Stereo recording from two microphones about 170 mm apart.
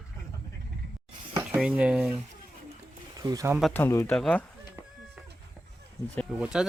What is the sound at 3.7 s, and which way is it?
Speech, 15° left (ahead or behind).